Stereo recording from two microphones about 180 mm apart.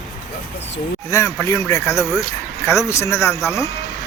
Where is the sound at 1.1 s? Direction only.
15° left (ahead or behind).